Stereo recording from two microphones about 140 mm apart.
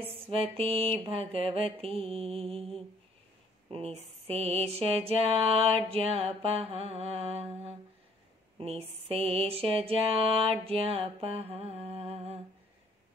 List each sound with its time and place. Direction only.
0.0 s mantra: 40° right (ahead or behind)
3.7 s mantra: 50° right (ahead or behind)
8.5 s mantra: 45° right (ahead or behind)